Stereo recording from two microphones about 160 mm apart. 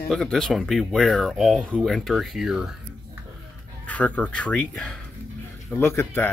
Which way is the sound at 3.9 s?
10° left (ahead or behind).